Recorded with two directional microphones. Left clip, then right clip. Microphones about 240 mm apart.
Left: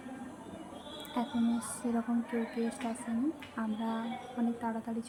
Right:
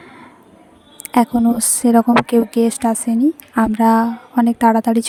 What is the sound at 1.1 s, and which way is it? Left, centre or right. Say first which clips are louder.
A woman's voice: right 19 dB; right.